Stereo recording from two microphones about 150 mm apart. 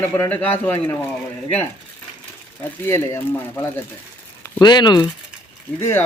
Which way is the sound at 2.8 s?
15° left (ahead or behind).